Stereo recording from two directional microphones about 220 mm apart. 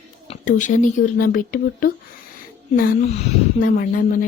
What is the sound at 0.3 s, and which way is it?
Speech, 35° left (ahead or behind).